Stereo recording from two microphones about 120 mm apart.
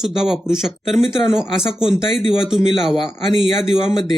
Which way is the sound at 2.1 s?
45° left (ahead or behind).